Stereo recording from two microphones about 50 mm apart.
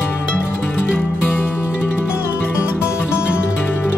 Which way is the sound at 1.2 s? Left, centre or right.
Left.